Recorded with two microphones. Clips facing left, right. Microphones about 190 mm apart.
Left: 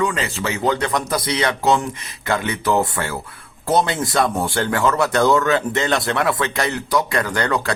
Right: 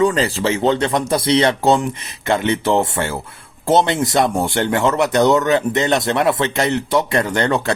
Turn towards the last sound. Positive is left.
turn(degrees=-25)  # may be behind; listen again after turning